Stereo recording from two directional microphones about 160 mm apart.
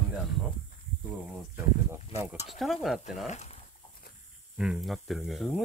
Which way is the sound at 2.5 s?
Centre (ahead or behind).